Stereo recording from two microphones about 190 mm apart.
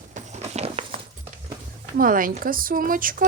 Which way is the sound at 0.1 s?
40° right (ahead or behind).